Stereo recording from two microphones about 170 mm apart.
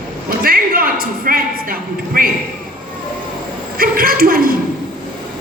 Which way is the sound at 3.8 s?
60° right (ahead or behind).